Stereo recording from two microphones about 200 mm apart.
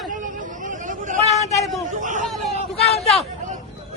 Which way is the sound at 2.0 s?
40° right (ahead or behind).